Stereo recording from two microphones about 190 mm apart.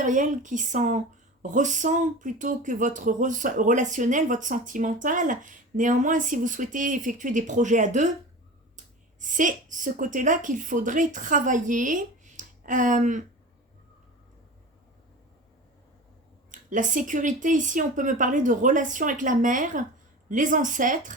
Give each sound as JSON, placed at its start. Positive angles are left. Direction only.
{"t": 0.0, "sound": "speech", "side_deg": -40}
{"t": 9.2, "sound": "speech", "side_deg": -45}
{"t": 16.5, "sound": "speech", "side_deg": -45}